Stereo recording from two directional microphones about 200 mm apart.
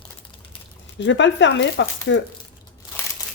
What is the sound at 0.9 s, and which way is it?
Speech, 65° left (ahead or behind).